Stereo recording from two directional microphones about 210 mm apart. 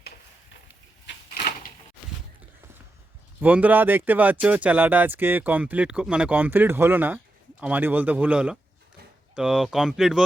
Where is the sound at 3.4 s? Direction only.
10° right (ahead or behind).